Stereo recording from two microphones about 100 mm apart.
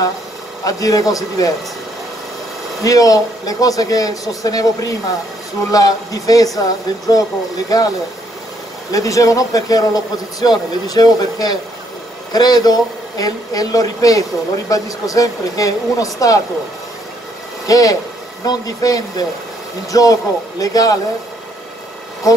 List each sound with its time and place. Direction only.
0.7 s a man's voice: 35° left (ahead or behind)
2.8 s a man's voice: 35° left (ahead or behind)
8.9 s a man's voice: 35° left (ahead or behind)
17.6 s a man's voice: 35° left (ahead or behind)
22.2 s a man's voice: 35° left (ahead or behind)